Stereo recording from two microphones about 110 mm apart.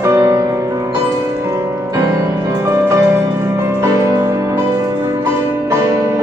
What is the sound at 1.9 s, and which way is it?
Music, 25° right (ahead or behind).